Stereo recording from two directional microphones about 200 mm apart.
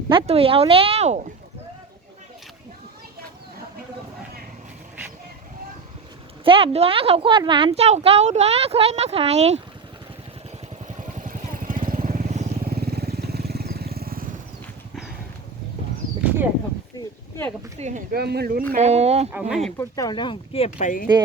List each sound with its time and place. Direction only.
0.1 s speech: 25° right (ahead or behind)
6.4 s a woman's voice: 25° right (ahead or behind)
10.8 s vehicle: 40° right (ahead or behind)
12.6 s vehicle: 50° right (ahead or behind)
17.7 s a woman's voice: 35° right (ahead or behind)
18.1 s speech: 50° right (ahead or behind)
18.7 s a woman's voice: 35° right (ahead or behind)
19.3 s speech: 5° right (ahead or behind)
19.8 s speech: 20° left (ahead or behind); by 21.1 s 40° left (ahead or behind)